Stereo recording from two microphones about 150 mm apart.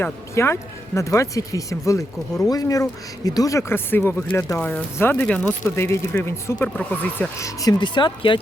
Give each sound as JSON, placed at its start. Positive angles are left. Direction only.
{"t": 0.0, "sound": "speech", "side_deg": 15}